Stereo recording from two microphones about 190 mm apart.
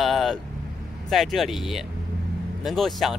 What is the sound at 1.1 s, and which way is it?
Speech, centre (ahead or behind).